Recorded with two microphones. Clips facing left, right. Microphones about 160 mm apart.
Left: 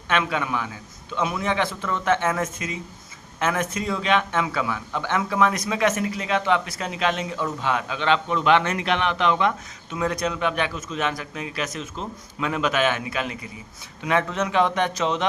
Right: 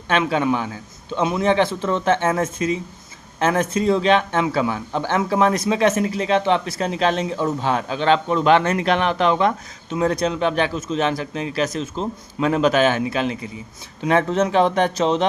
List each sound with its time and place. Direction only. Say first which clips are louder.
0.1 s a man's voice: right 5 dB; 30° right (ahead or behind)